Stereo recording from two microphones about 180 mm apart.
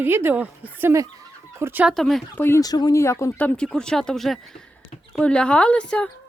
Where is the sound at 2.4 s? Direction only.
20° left (ahead or behind).